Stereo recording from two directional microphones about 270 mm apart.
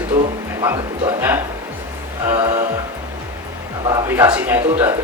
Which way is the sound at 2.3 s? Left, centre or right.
Centre.